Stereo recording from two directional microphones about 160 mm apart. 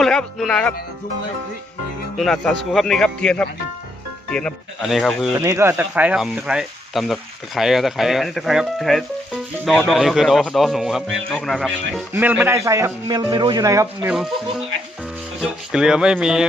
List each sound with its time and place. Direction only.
0.0 s speech: 5° left (ahead or behind)
2.1 s speech: centre (ahead or behind)
5.4 s speech: 20° right (ahead or behind); by 12.0 s centre (ahead or behind)
12.1 s speech: 10° right (ahead or behind)
15.4 s speech: 5° right (ahead or behind)